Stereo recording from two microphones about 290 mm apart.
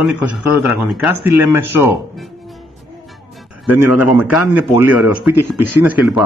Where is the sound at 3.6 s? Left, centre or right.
Left.